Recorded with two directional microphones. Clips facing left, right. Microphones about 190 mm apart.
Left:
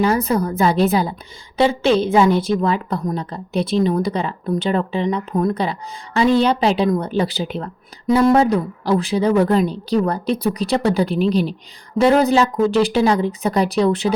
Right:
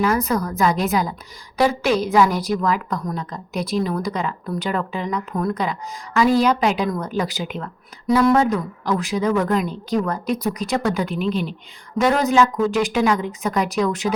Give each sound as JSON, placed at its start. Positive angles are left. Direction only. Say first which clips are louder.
{"t": 0.0, "sound": "a woman's voice", "louder": "left 3 dB", "side_deg": 30}